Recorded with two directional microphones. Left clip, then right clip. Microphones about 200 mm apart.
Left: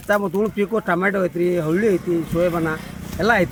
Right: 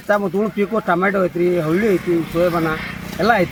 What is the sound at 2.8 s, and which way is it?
Speech, 20° left (ahead or behind).